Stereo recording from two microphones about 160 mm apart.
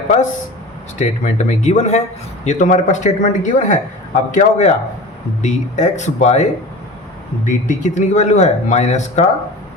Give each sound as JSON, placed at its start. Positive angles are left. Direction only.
{"t": 0.9, "sound": "a man's voice", "side_deg": 50}